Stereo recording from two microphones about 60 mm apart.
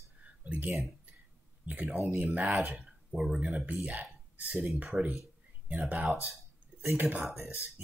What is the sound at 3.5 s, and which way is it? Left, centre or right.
Speech, right.